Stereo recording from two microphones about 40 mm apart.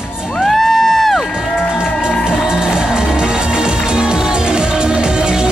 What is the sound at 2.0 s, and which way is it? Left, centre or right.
Music, centre.